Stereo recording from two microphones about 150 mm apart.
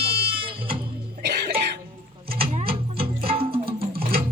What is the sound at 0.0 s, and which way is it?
Music, 40° right (ahead or behind).